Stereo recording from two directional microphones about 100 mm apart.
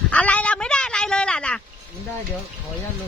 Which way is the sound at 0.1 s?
15° left (ahead or behind).